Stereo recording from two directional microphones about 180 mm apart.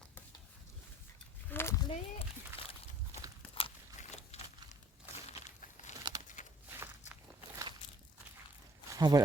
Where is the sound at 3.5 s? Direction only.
35° left (ahead or behind).